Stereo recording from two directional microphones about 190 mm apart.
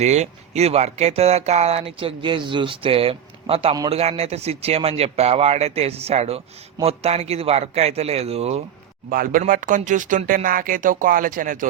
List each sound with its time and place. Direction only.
0.0 s speech: 35° right (ahead or behind)
9.0 s speech: 50° right (ahead or behind)